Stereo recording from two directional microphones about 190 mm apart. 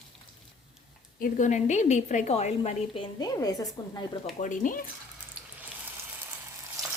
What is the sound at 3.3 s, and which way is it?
Speech, 20° left (ahead or behind).